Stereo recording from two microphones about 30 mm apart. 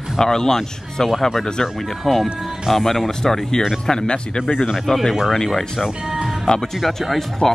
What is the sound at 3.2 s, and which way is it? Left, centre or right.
Speech, centre.